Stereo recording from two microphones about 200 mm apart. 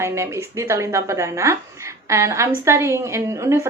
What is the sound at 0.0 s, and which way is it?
A woman's voice, 15° right (ahead or behind).